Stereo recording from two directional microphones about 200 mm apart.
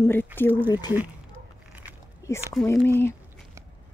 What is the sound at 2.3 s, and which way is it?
Speech, 15° left (ahead or behind).